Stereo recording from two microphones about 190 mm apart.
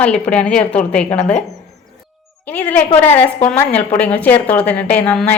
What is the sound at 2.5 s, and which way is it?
A woman's voice, 10° left (ahead or behind).